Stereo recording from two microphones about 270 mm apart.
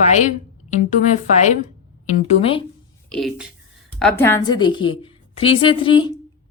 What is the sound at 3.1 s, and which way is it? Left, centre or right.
A woman's voice, centre.